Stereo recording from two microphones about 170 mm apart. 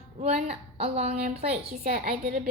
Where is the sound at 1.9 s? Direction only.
55° right (ahead or behind).